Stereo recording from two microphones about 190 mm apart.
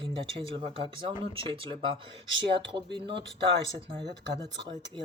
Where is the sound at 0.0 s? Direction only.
25° right (ahead or behind).